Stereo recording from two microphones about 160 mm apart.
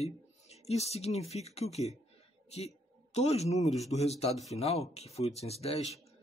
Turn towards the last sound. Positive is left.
turn(degrees=40)  # may be behind; listen again after turning